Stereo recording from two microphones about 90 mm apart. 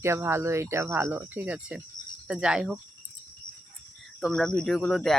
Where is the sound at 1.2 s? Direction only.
20° right (ahead or behind).